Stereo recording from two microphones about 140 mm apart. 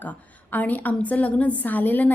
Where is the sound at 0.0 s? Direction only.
10° left (ahead or behind).